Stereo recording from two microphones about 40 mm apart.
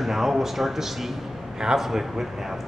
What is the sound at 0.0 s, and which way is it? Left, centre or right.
Speech, centre.